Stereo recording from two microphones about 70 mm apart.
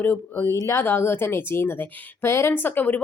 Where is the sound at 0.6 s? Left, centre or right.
Left.